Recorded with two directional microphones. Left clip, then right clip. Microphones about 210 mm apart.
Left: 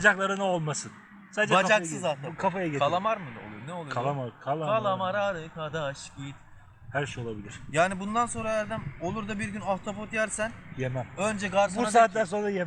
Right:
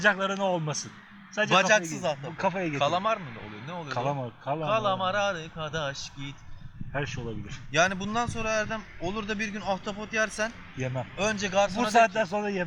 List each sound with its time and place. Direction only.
0.0 s a man's voice: 15° left (ahead or behind)
2.0 s a man's voice: 5° right (ahead or behind)
2.4 s a man's voice: 15° left (ahead or behind)
2.7 s a man's voice: 10° right (ahead or behind)
3.8 s a man's voice: 15° left (ahead or behind)
4.6 s a man's voice: 15° right (ahead or behind)
6.9 s a man's voice: 15° left (ahead or behind)
7.7 s a man's voice: 10° right (ahead or behind)
10.8 s a man's voice: 10° left (ahead or behind)
11.2 s a man's voice: 10° right (ahead or behind)
11.7 s a man's voice: 15° left (ahead or behind)